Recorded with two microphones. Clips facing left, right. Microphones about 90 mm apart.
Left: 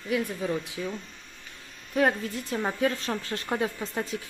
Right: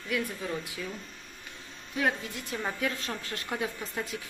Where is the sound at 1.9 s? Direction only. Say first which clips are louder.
Left 5 dB; 40° left (ahead or behind).